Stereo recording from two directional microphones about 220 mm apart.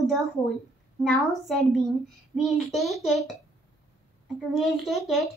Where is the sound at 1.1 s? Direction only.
Centre (ahead or behind).